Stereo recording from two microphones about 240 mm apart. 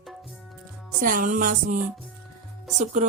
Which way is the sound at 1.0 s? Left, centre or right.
Right.